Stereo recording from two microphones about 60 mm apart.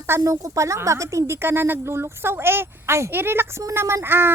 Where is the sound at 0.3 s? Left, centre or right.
Right.